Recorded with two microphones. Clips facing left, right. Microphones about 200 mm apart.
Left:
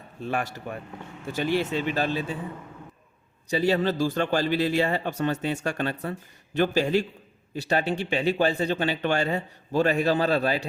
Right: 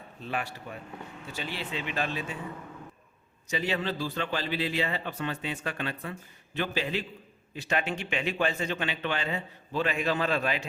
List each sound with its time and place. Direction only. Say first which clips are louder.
0.7 s speech: left 5 dB; 55° left (ahead or behind); by 2.4 s 35° left (ahead or behind)
3.5 s speech: left 7 dB; 40° left (ahead or behind)